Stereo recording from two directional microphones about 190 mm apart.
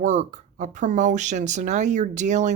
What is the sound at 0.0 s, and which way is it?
Speech, 40° right (ahead or behind).